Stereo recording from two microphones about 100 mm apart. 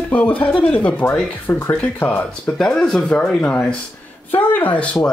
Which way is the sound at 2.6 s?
5° left (ahead or behind).